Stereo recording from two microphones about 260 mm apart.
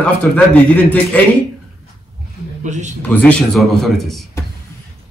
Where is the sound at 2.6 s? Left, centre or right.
Right.